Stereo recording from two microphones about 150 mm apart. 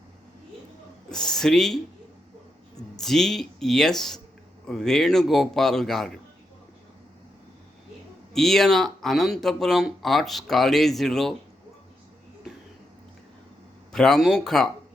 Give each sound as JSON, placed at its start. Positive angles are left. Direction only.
{"t": 1.1, "sound": "speech", "side_deg": 5}
{"t": 2.9, "sound": "speech", "side_deg": 5}
{"t": 8.3, "sound": "speech", "side_deg": 0}
{"t": 13.9, "sound": "speech", "side_deg": 0}